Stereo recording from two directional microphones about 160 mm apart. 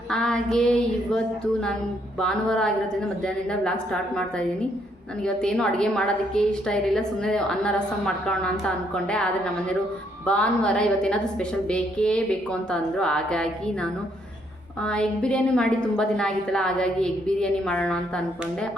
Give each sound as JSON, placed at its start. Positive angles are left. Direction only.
{"t": 0.1, "sound": "a woman's voice", "side_deg": 5}
{"t": 5.2, "sound": "a woman's voice", "side_deg": 5}
{"t": 14.8, "sound": "a woman's voice", "side_deg": 5}